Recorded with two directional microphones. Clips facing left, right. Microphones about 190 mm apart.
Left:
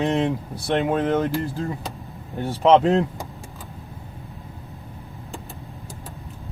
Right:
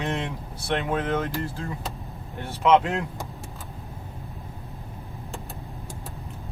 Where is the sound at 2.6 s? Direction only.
35° left (ahead or behind).